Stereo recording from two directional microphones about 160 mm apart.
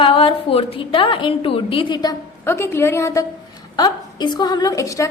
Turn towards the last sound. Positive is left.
turn(degrees=20)  # may be behind; listen again after turning